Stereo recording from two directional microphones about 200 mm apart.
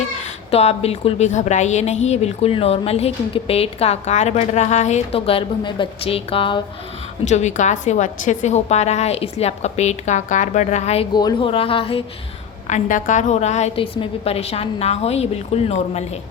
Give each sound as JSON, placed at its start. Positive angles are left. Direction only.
{"t": 0.5, "sound": "a woman's voice", "side_deg": 30}
{"t": 11.1, "sound": "speech", "side_deg": 20}
{"t": 12.6, "sound": "a woman's voice", "side_deg": 40}